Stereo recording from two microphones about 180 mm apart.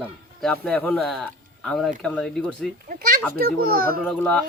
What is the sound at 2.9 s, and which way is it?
A child's voice, 55° right (ahead or behind).